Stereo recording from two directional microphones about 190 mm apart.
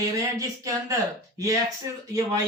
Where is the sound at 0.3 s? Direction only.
15° right (ahead or behind).